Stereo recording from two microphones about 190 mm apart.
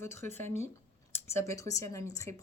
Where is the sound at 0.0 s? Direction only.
15° left (ahead or behind).